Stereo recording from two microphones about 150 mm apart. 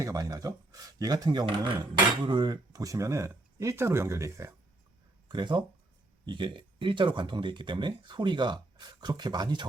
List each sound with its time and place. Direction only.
0.0 s speech: 25° right (ahead or behind)
5.3 s speech: 30° right (ahead or behind)